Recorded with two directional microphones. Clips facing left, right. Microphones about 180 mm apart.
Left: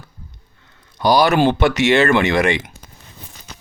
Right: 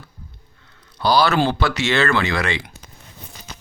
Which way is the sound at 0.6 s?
15° left (ahead or behind).